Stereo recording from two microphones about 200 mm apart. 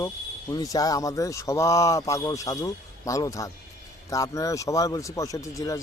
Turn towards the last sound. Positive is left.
turn(degrees=15)  # may be behind; listen again after turning